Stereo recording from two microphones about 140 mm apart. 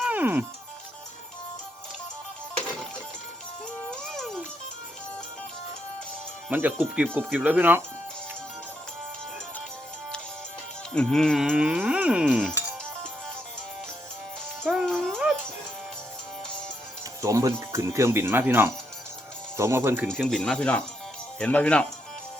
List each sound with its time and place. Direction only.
0.0 s music: 10° right (ahead or behind)
3.8 s music: centre (ahead or behind)
6.5 s speech: 10° right (ahead or behind)
10.9 s cattle: 5° left (ahead or behind)
14.6 s music: centre (ahead or behind)
17.2 s speech: 25° right (ahead or behind)
20.1 s cattle: 5° left (ahead or behind)
21.3 s speech: 10° left (ahead or behind)